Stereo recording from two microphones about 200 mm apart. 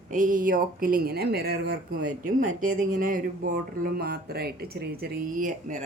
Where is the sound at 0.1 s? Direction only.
40° right (ahead or behind).